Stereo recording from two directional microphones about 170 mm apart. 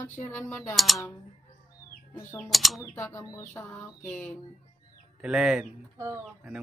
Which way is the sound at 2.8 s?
15° left (ahead or behind).